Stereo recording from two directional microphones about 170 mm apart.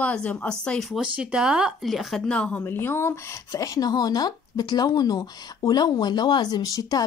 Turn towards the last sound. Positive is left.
turn(degrees=20)  # may be behind; listen again after turning